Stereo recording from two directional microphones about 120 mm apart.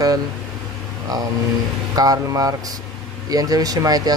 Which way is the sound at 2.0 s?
30° right (ahead or behind).